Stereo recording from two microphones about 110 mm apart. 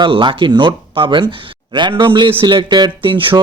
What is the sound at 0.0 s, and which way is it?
Speech, 45° right (ahead or behind).